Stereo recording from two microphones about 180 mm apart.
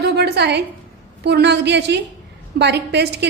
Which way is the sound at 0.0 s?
65° right (ahead or behind).